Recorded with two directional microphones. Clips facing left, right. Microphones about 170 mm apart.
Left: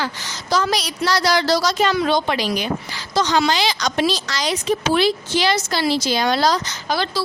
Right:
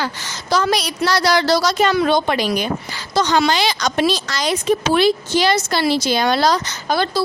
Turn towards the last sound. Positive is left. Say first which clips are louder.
# right 3 dB
turn(degrees=-50)  # may be behind; listen again after turning